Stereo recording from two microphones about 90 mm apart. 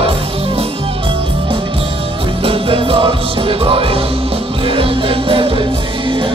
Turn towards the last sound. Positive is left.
turn(degrees=-70)  # may be behind; listen again after turning